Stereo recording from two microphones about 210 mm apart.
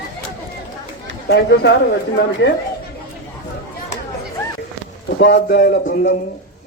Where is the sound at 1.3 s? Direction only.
55° left (ahead or behind).